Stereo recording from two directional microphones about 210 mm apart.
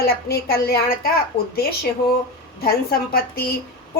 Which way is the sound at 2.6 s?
45° left (ahead or behind).